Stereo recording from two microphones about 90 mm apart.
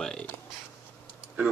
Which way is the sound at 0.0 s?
10° left (ahead or behind).